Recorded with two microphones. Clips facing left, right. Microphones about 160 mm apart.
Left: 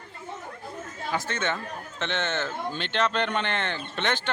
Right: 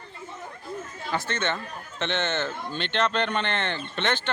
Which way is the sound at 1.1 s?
5° left (ahead or behind).